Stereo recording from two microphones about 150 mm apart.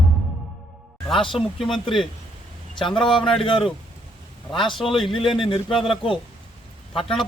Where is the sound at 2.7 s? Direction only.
35° left (ahead or behind).